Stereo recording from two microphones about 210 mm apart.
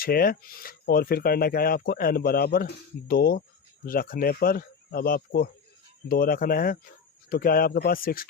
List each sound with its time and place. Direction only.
0.0 s speech: 45° left (ahead or behind)